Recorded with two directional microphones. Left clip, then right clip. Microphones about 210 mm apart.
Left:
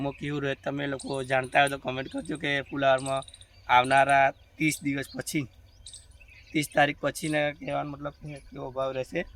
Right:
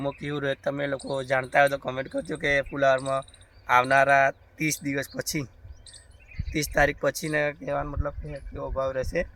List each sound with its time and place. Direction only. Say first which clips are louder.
0.0 s speech: right 2 dB; centre (ahead or behind); by 5.5 s 20° right (ahead or behind)
6.5 s speech: right 1 dB; 15° right (ahead or behind)